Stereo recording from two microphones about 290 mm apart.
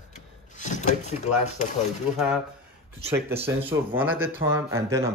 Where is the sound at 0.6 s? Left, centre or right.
Left.